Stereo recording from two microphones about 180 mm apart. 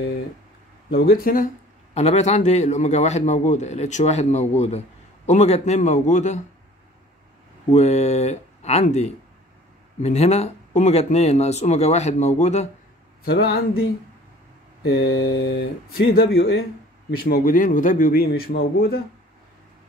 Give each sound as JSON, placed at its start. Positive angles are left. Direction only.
{"t": 0.8, "sound": "a man's voice", "side_deg": 55}
{"t": 2.0, "sound": "a man's voice", "side_deg": 40}
{"t": 7.7, "sound": "a man's voice", "side_deg": 40}
{"t": 13.2, "sound": "a man's voice", "side_deg": 60}
{"t": 14.9, "sound": "a man's voice", "side_deg": 90}